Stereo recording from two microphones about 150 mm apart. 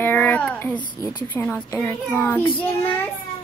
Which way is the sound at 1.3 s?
15° left (ahead or behind).